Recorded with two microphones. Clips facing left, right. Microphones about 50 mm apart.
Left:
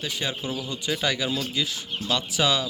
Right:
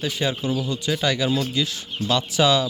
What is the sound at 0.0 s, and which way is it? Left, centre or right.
Speech, centre.